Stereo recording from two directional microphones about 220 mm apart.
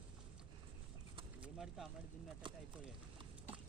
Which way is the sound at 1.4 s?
Centre (ahead or behind).